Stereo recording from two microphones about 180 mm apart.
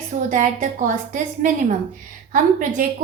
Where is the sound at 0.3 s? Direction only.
45° right (ahead or behind).